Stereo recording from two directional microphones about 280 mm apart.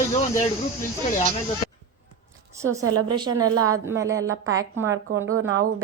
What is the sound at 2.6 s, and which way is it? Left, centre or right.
Speech, centre.